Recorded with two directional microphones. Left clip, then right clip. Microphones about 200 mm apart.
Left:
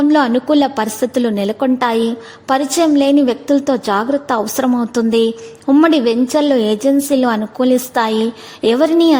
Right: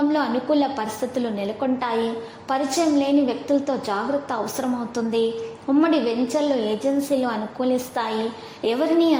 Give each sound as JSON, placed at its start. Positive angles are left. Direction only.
{"t": 0.1, "sound": "a woman's voice", "side_deg": 45}